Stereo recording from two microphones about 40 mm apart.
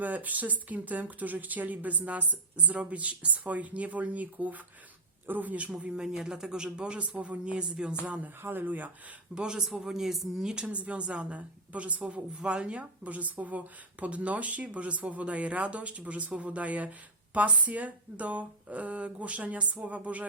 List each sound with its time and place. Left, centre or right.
0.0 s speech: right
5.9 s speech: centre
7.2 s speech: right
8.4 s speech: right
9.3 s speech: centre
10.5 s speech: right
12.0 s speech: right
13.1 s speech: right